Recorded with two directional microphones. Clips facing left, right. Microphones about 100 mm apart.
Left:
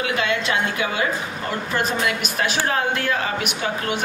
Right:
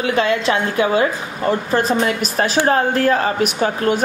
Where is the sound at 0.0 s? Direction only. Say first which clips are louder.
Right 6 dB; 35° right (ahead or behind).